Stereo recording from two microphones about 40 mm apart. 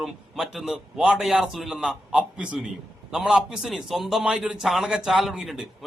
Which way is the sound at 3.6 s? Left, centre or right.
Centre.